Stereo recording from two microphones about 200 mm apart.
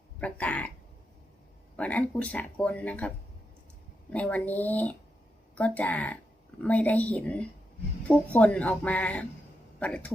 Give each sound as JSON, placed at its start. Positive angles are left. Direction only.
{"t": 0.2, "sound": "speech", "side_deg": 5}
{"t": 1.7, "sound": "speech", "side_deg": 5}
{"t": 4.1, "sound": "speech", "side_deg": 5}